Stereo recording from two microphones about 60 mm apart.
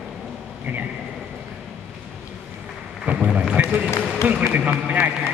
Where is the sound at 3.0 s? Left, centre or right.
Right.